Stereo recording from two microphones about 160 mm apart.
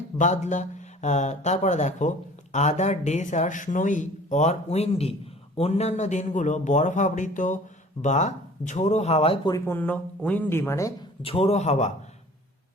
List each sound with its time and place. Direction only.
0.2 s speech: 50° left (ahead or behind)
9.5 s speech: 15° left (ahead or behind)
11.2 s a man's voice: 35° left (ahead or behind)